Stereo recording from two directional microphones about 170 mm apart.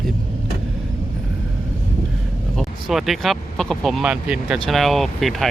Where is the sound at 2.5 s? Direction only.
Centre (ahead or behind).